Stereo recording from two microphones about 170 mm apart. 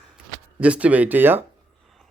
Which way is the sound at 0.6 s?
10° right (ahead or behind).